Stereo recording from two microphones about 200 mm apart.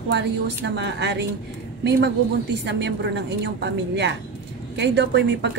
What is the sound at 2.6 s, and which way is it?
A woman's voice, 60° right (ahead or behind).